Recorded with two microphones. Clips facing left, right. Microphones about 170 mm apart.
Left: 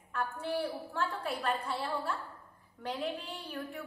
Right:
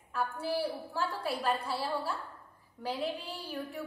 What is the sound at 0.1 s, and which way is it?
A woman's voice, 5° right (ahead or behind).